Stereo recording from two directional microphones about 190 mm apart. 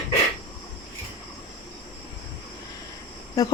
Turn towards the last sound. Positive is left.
turn(degrees=20)  # may be behind; listen again after turning